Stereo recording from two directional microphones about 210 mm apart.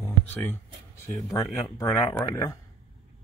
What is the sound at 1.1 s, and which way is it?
Speech, 15° left (ahead or behind).